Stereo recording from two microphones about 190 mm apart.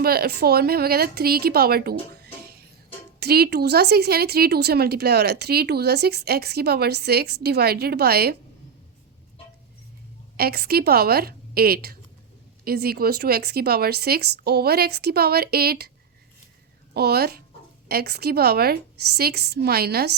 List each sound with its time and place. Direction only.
0.0 s a woman's voice: 55° right (ahead or behind)
10.3 s a woman's voice: 55° right (ahead or behind)
16.9 s speech: 55° right (ahead or behind)